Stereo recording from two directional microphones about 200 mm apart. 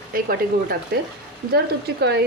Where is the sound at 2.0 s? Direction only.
55° right (ahead or behind).